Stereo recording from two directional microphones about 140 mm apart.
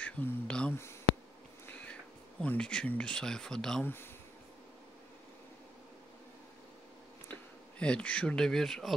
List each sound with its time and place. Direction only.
0.0 s speech: 10° left (ahead or behind)
1.7 s cat: 10° left (ahead or behind)
2.4 s speech: 10° left (ahead or behind)
3.8 s speech: 15° left (ahead or behind)
7.8 s speech: 10° left (ahead or behind)